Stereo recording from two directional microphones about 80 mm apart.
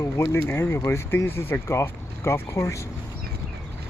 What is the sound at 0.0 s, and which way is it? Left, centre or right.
Speech, left.